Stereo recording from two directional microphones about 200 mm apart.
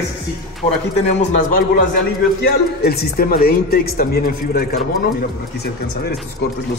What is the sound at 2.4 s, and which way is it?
Speech, 50° left (ahead or behind).